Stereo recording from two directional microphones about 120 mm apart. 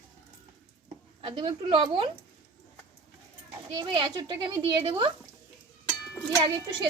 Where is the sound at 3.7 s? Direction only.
35° right (ahead or behind).